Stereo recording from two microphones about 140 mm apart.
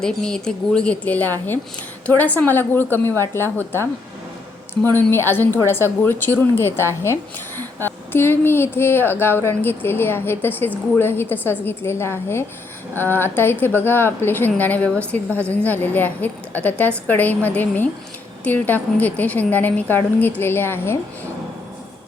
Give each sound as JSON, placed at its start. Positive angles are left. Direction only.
{"t": 0.0, "sound": "a woman's voice", "side_deg": 5}
{"t": 4.9, "sound": "a woman's voice", "side_deg": 15}